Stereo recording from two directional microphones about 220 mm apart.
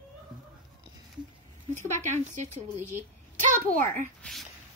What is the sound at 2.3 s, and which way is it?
Speech, 30° right (ahead or behind).